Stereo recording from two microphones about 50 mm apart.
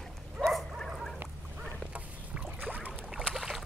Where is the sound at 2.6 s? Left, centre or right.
Right.